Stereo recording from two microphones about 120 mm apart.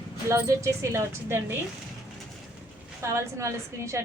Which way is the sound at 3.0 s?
25° right (ahead or behind).